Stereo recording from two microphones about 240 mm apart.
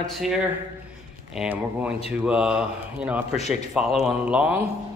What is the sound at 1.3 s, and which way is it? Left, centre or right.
A man's voice, centre.